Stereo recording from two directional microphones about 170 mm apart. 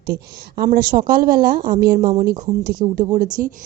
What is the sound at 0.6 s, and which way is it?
A woman's voice, 60° right (ahead or behind).